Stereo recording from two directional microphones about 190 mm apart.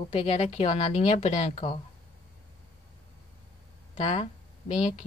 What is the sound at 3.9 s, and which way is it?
Speech, 30° left (ahead or behind).